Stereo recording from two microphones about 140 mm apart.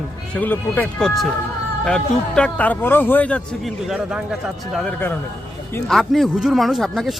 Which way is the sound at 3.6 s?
5° right (ahead or behind).